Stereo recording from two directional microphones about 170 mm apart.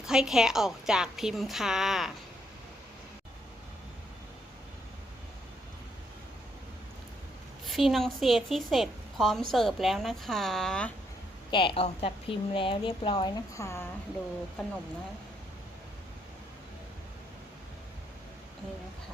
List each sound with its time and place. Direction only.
0.0 s a woman's voice: 5° right (ahead or behind)
7.6 s a woman's voice: centre (ahead or behind)
11.5 s a woman's voice: 30° left (ahead or behind); by 13.9 s 15° left (ahead or behind)